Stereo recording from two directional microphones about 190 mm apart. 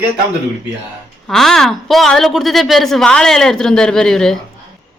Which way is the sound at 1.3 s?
Centre (ahead or behind).